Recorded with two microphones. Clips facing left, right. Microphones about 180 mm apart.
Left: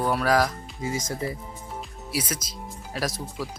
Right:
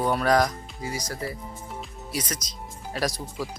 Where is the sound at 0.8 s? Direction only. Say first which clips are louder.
Left 3 dB; 25° left (ahead or behind).